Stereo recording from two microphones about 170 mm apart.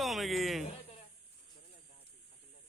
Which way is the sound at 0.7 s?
35° left (ahead or behind).